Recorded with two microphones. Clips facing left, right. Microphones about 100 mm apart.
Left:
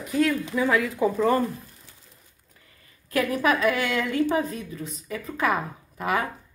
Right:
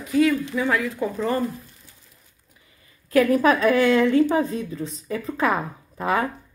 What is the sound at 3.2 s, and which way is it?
A woman's voice, 35° right (ahead or behind).